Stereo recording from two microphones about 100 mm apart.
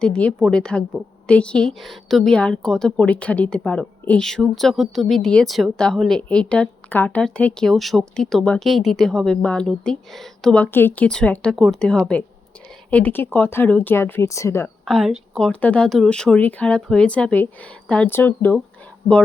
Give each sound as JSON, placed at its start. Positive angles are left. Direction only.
{"t": 0.0, "sound": "speech", "side_deg": 10}
{"t": 10.6, "sound": "speech", "side_deg": 20}
{"t": 11.5, "sound": "speech", "side_deg": 0}
{"t": 11.8, "sound": "speech", "side_deg": 10}
{"t": 14.8, "sound": "speech", "side_deg": 0}